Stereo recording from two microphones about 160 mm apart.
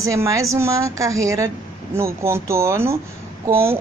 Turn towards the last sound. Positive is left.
turn(degrees=-15)  # may be behind; listen again after turning